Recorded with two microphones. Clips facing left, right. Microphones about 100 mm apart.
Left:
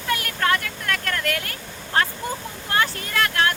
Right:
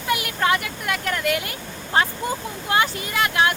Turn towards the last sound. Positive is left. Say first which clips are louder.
# right 1 dB
turn(degrees=-15)  # may be behind; listen again after turning